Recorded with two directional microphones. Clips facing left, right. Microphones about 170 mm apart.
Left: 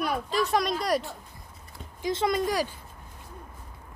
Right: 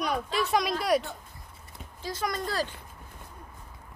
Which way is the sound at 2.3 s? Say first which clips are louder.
Left 4 dB; 15° left (ahead or behind).